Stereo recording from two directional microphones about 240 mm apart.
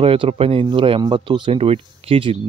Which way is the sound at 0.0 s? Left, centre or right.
Right.